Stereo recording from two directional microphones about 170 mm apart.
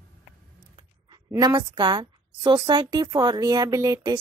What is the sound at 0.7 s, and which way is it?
A woman's voice, 25° right (ahead or behind).